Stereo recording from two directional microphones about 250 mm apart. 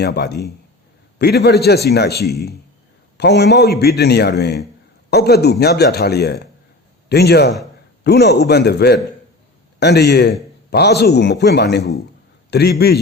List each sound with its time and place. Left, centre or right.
0.0 s a man's voice: left